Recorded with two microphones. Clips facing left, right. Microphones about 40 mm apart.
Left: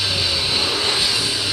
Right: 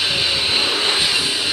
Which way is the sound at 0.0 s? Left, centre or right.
Right.